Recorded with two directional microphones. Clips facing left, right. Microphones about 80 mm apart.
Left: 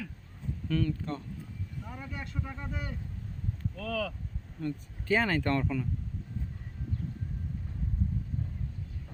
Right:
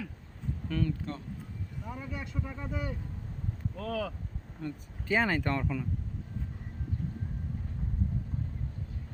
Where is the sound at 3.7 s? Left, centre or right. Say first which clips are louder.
Even; right.